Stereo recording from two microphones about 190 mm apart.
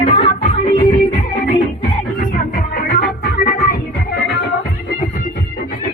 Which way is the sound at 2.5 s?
50° left (ahead or behind).